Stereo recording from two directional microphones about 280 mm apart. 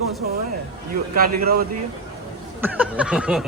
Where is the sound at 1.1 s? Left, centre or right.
Right.